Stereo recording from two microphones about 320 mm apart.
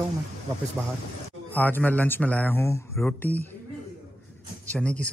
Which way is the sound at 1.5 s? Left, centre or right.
Centre.